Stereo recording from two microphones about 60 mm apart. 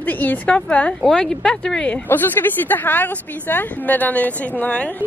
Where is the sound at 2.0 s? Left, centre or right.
Left.